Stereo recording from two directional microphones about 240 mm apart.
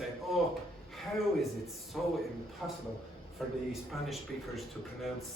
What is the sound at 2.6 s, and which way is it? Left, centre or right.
A man's voice, centre.